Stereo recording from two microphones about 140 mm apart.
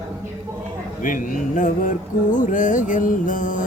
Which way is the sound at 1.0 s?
70° left (ahead or behind).